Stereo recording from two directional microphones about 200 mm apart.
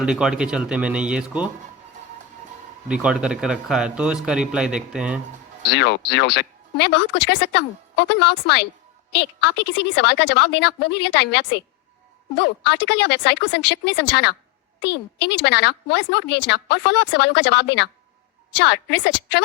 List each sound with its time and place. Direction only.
0.0 s a man's voice: 5° right (ahead or behind)
2.9 s a man's voice: 5° right (ahead or behind)
5.7 s a woman's voice: 55° left (ahead or behind)